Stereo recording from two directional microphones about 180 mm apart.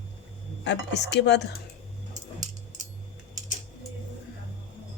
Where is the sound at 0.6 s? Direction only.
75° left (ahead or behind).